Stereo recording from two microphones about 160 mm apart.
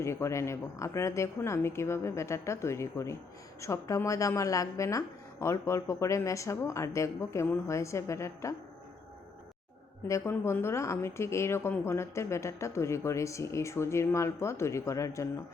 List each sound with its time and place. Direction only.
0.0 s a woman's voice: 15° left (ahead or behind)
10.1 s speech: 15° left (ahead or behind)